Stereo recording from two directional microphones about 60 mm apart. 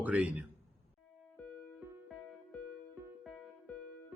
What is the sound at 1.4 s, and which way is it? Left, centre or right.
Music, left.